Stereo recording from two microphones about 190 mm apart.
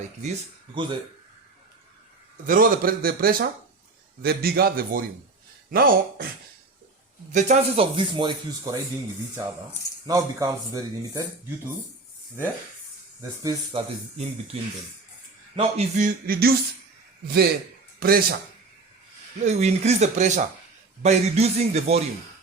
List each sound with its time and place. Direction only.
0.2 s speech: 30° right (ahead or behind)
2.5 s a sound: 50° right (ahead or behind)
7.3 s speech: 35° right (ahead or behind)
10.1 s speech: 15° right (ahead or behind)
13.4 s speech: 20° right (ahead or behind)
14.2 s speech: 30° right (ahead or behind)
15.5 s a sound: 35° right (ahead or behind)
17.2 s a man's voice: 55° right (ahead or behind)
18.0 s a sound: 50° right (ahead or behind)
19.5 s speech: 35° right (ahead or behind)